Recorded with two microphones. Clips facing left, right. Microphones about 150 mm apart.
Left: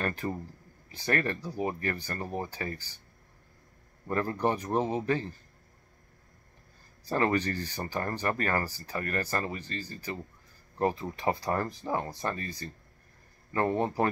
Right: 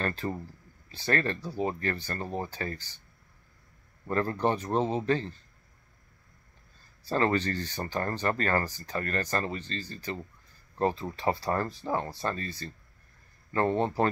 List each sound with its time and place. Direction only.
0.0 s speech: 15° left (ahead or behind)
4.1 s speech: 15° left (ahead or behind)
7.1 s speech: 15° left (ahead or behind)